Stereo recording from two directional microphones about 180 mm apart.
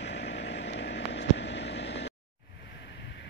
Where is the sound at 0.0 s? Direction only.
75° left (ahead or behind).